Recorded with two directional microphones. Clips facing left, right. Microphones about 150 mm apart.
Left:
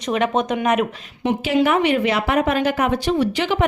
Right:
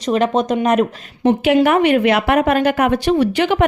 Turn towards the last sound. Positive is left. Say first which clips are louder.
# right 4 dB
turn(degrees=-55)  # may be behind; listen again after turning